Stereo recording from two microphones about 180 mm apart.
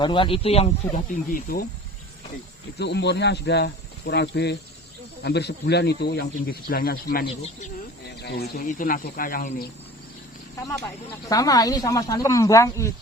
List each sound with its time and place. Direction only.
0.0 s speech: 25° left (ahead or behind)
0.9 s speech: 50° left (ahead or behind)
2.7 s speech: 70° left (ahead or behind); by 9.6 s 50° left (ahead or behind)
11.3 s speech: 20° left (ahead or behind)